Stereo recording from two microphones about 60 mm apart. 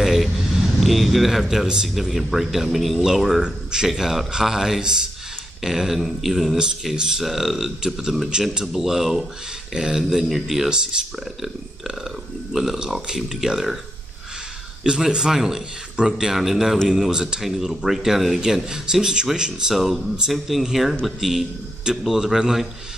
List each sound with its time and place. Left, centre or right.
0.0 s a sound: centre
1.4 s speech: centre
12.5 s speech: centre
14.8 s speech: centre